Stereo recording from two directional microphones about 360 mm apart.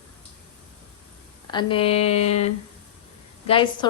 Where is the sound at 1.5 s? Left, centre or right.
Centre.